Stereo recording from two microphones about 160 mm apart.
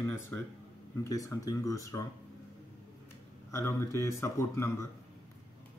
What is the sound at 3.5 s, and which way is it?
Speech, 15° left (ahead or behind).